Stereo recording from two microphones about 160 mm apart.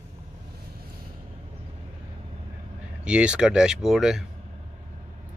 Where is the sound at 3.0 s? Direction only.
5° right (ahead or behind).